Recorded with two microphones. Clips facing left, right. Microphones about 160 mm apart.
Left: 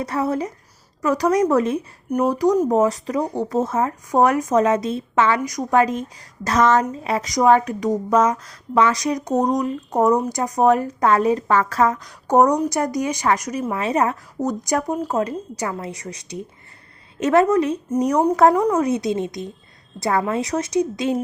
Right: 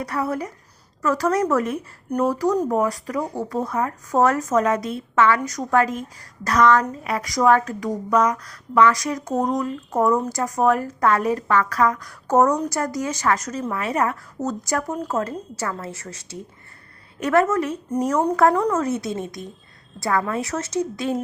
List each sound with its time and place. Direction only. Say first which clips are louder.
0.0 s a woman's voice: left 3 dB; 20° left (ahead or behind)